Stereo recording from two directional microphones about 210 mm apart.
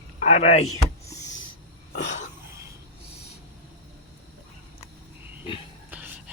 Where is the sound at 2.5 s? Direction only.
15° right (ahead or behind).